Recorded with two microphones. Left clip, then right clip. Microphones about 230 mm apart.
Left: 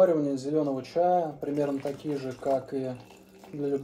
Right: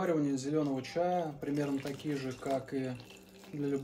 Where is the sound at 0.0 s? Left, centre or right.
Centre.